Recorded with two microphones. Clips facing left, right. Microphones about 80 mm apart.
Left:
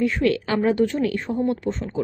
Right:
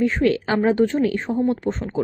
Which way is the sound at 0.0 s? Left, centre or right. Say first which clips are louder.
Right 2 dB; right.